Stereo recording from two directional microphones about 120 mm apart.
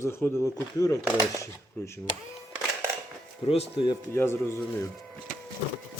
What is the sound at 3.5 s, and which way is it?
Speech, 50° left (ahead or behind).